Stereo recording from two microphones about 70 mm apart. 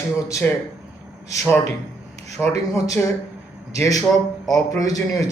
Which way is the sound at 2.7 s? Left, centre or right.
Left.